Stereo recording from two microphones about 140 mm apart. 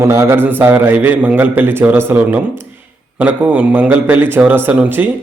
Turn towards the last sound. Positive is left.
turn(degrees=-15)  # may be behind; listen again after turning